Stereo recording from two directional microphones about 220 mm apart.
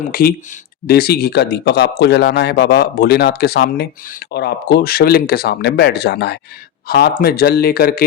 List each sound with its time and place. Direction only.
0.1 s speech: 40° left (ahead or behind)